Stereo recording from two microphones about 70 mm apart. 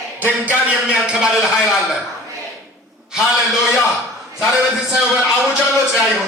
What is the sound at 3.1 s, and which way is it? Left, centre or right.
A man's voice, centre.